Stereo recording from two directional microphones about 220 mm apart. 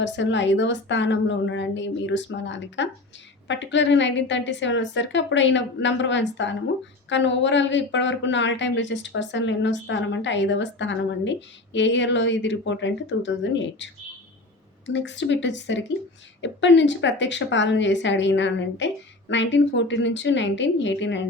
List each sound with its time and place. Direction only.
0.0 s speech: 55° left (ahead or behind)